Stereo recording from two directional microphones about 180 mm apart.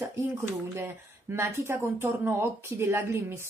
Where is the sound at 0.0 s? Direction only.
15° right (ahead or behind).